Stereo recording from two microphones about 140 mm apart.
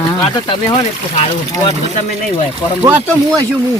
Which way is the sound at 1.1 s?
45° left (ahead or behind).